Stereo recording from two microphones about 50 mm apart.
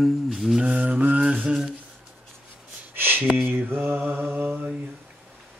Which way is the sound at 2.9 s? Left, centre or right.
Right.